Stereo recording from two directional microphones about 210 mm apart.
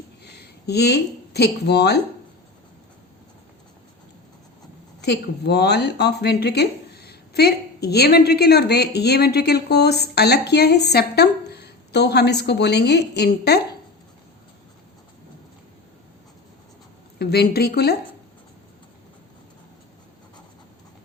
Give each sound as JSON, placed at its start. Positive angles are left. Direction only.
{"t": 0.3, "sound": "speech", "side_deg": 50}
{"t": 4.9, "sound": "a woman's voice", "side_deg": 50}
{"t": 17.2, "sound": "a woman's voice", "side_deg": 50}